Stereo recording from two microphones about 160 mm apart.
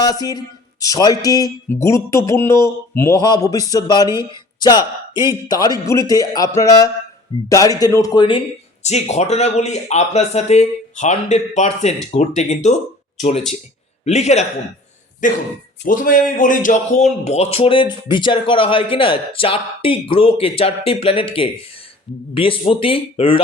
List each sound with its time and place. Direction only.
0.0 s speech: 25° left (ahead or behind)
5.3 s speech: 25° left (ahead or behind)
8.8 s speech: 45° left (ahead or behind)
14.0 s a man's voice: 45° left (ahead or behind)